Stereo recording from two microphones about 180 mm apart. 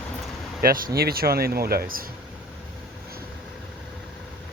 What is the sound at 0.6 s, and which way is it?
Speech, 55° right (ahead or behind).